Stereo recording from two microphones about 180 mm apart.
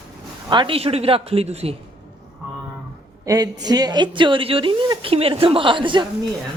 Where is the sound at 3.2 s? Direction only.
20° right (ahead or behind).